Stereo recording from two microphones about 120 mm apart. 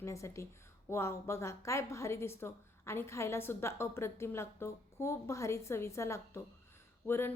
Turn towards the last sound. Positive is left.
turn(degrees=20)  # may be behind; listen again after turning